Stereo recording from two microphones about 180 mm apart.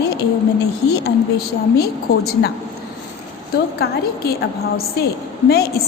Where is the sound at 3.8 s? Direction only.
65° left (ahead or behind).